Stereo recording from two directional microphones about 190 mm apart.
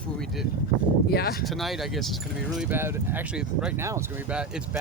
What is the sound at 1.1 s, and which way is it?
Speech, 55° left (ahead or behind).